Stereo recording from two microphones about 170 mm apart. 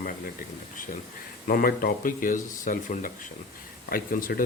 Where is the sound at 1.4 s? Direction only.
60° left (ahead or behind).